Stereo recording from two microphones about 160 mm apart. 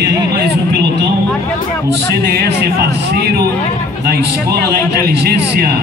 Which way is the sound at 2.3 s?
90° right.